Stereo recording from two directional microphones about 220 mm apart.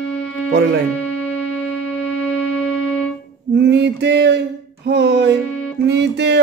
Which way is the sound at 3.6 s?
50° right (ahead or behind).